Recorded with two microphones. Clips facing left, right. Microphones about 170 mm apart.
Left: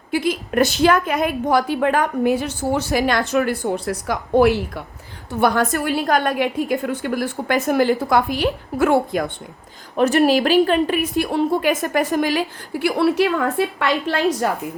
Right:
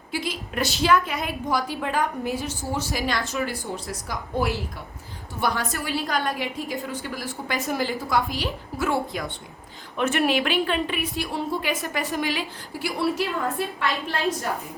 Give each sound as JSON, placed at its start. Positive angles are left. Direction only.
{"t": 0.1, "sound": "a woman's voice", "side_deg": 55}
{"t": 9.9, "sound": "a woman's voice", "side_deg": 40}
{"t": 12.8, "sound": "a woman's voice", "side_deg": 70}